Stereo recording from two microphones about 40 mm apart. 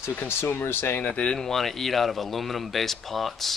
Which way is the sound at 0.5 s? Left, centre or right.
Left.